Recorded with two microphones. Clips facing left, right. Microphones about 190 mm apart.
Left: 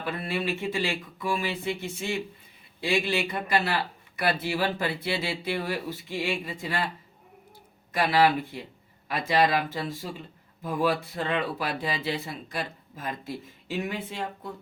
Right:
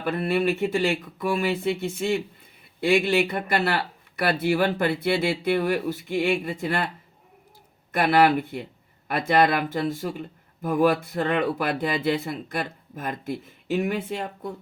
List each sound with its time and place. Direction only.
0.0 s speech: 60° right (ahead or behind)
2.8 s speech: 55° right (ahead or behind)
7.9 s speech: 55° right (ahead or behind)